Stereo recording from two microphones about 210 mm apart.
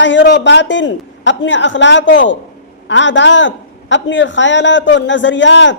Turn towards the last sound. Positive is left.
turn(degrees=60)  # may be behind; listen again after turning